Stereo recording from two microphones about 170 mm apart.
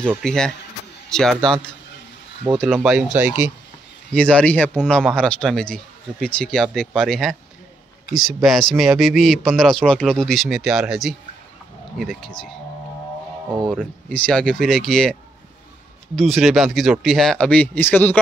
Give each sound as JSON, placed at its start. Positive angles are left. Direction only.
{"t": 0.2, "sound": "a man's voice", "side_deg": 5}
{"t": 4.1, "sound": "a man's voice", "side_deg": 5}
{"t": 13.7, "sound": "a man's voice", "side_deg": 5}
{"t": 16.2, "sound": "a man's voice", "side_deg": 0}